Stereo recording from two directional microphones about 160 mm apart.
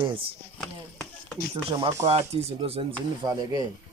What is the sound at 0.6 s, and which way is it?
Chop, 10° left (ahead or behind).